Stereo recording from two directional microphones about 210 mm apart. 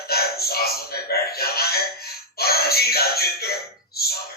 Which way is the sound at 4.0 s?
50° left (ahead or behind).